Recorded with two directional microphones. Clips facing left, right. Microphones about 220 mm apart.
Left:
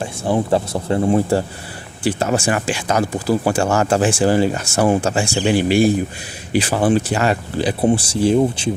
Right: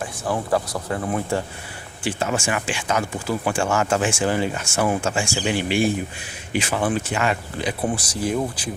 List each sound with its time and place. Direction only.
0.0 s speech: 25° left (ahead or behind)